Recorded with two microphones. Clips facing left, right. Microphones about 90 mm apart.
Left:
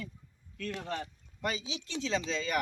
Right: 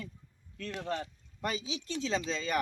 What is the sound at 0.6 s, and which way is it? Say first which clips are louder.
A man's voice: right 1 dB; 30° right (ahead or behind).